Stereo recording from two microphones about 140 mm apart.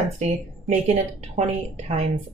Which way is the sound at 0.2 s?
50° right (ahead or behind).